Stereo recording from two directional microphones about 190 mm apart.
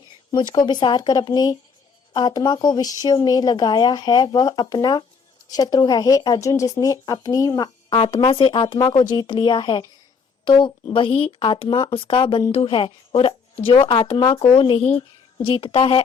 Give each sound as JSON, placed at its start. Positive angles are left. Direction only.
{"t": 0.3, "sound": "speech", "side_deg": 20}